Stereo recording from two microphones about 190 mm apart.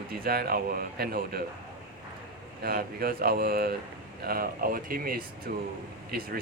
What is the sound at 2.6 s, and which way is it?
Speech, 50° right (ahead or behind).